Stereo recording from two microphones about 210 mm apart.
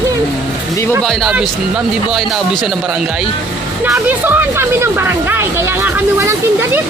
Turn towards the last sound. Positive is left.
turn(degrees=-10)  # may be behind; listen again after turning